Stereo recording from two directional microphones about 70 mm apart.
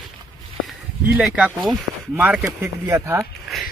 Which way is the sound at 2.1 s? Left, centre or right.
Right.